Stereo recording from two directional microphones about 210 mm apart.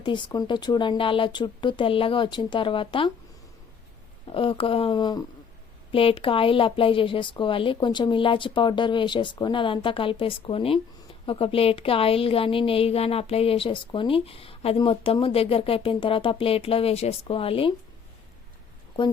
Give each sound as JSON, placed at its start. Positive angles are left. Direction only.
{"t": 0.0, "sound": "a woman's voice", "side_deg": 20}
{"t": 4.3, "sound": "a woman's voice", "side_deg": 25}